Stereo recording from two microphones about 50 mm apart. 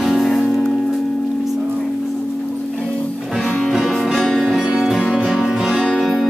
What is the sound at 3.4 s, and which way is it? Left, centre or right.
Music, centre.